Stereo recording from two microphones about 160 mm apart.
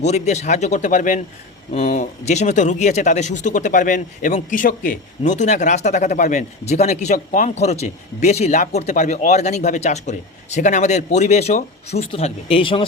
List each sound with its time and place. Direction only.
0.0 s speech: 45° left (ahead or behind)